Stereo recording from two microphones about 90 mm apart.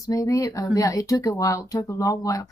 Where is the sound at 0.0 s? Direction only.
40° left (ahead or behind).